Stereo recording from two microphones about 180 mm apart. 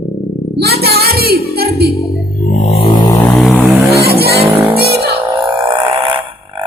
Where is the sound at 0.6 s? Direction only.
60° right (ahead or behind).